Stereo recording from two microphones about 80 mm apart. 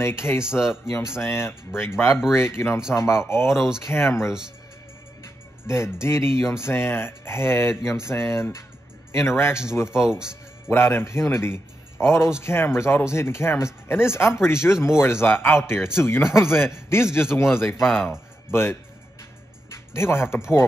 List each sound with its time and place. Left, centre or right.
0.0 s speech: left
0.5 s speech: centre
0.9 s speech: left
3.4 s speech: centre
3.9 s speech: left
5.7 s speech: left
10.0 s speech: centre
10.7 s speech: left
17.6 s speech: centre
18.5 s speech: left
19.9 s speech: left